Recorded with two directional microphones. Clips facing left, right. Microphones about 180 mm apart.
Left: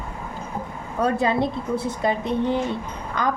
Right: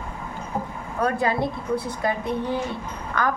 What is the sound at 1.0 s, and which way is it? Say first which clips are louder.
A woman's voice: left 2 dB; 25° left (ahead or behind).